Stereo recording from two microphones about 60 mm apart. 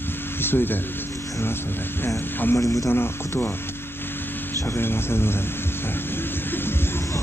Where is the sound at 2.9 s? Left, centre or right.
Left.